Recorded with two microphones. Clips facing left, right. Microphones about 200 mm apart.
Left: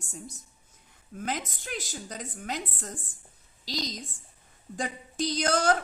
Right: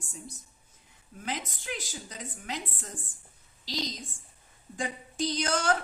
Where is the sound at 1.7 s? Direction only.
45° left (ahead or behind).